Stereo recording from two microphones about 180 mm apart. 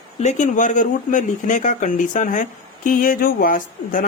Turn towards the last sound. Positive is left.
turn(degrees=50)  # may be behind; listen again after turning